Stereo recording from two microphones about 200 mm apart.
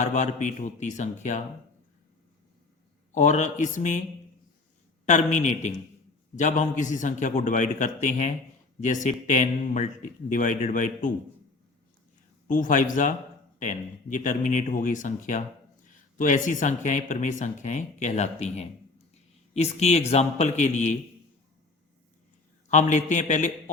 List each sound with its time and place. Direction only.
0.0 s speech: 35° left (ahead or behind)
3.2 s speech: 35° left (ahead or behind)
5.0 s speech: 35° left (ahead or behind)
12.5 s a man's voice: 40° left (ahead or behind)
22.7 s speech: 35° left (ahead or behind)